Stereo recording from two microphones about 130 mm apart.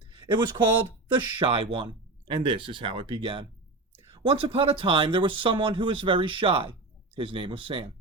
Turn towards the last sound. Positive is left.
turn(degrees=-40)  # may be behind; listen again after turning